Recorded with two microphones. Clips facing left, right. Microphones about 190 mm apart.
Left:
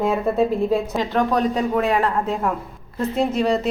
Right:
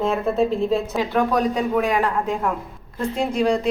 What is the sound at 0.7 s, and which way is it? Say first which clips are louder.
A woman's voice: even; centre (ahead or behind).